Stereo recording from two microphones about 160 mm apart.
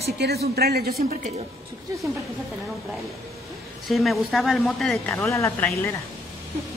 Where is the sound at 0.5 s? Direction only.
75° right (ahead or behind).